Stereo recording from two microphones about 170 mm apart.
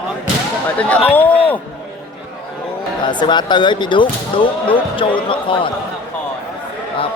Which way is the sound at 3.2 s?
25° left (ahead or behind).